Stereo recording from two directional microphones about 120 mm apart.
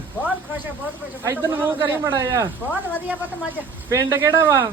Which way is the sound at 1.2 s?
20° right (ahead or behind).